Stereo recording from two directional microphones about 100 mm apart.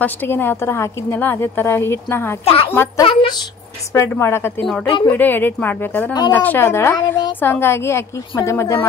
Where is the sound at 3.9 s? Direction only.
25° left (ahead or behind).